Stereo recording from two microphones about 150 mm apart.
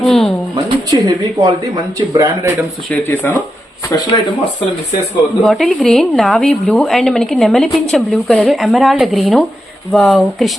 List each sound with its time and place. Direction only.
0.0 s a sound: centre (ahead or behind)
0.5 s speech: 25° right (ahead or behind)
2.9 s speech: 10° left (ahead or behind)
3.8 s speech: 30° left (ahead or behind)
5.4 s speech: centre (ahead or behind)